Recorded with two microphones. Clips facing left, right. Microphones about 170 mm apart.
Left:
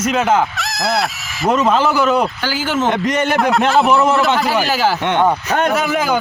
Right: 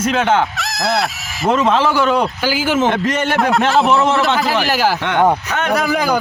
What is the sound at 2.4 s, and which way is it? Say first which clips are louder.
Speech: right 2 dB; 10° right (ahead or behind).